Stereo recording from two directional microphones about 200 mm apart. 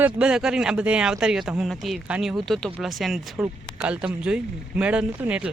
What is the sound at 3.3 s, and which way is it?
Speech, 15° right (ahead or behind).